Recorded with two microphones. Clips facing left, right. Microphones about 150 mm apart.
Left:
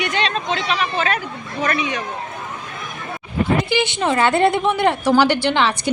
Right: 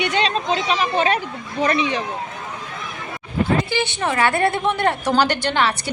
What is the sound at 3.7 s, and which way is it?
Speech, 20° left (ahead or behind).